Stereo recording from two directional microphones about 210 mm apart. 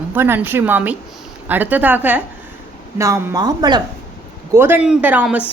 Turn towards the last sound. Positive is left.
turn(degrees=-5)  # may be behind; listen again after turning